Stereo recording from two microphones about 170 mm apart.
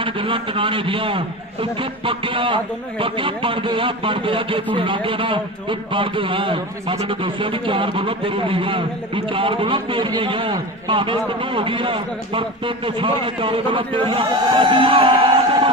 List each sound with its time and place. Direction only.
0.0 s a man's voice: 30° right (ahead or behind)